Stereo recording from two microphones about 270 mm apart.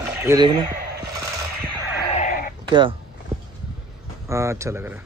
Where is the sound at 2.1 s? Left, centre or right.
Left.